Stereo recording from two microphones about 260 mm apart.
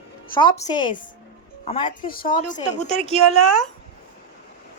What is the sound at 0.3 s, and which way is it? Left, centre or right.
A woman's voice, centre.